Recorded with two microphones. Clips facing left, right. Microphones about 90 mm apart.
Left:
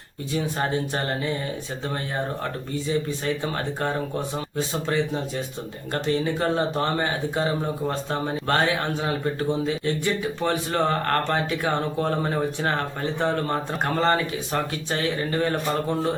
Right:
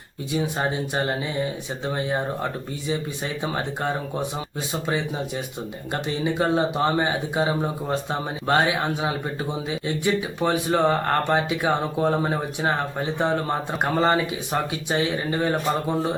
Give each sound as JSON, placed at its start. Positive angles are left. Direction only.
{"t": 0.3, "sound": "speech", "side_deg": -15}
{"t": 2.4, "sound": "speech", "side_deg": -15}